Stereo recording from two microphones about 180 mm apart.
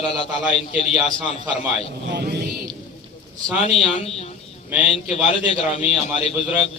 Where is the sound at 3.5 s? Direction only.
35° left (ahead or behind).